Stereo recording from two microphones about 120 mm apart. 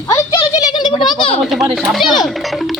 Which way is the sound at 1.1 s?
45° left (ahead or behind).